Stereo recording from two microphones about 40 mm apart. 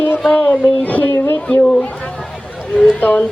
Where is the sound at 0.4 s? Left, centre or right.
Left.